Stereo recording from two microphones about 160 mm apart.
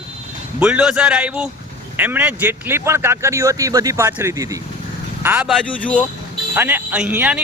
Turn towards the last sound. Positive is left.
turn(degrees=-10)  # may be behind; listen again after turning